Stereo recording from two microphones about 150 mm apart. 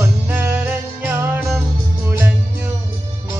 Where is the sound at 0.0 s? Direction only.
15° right (ahead or behind).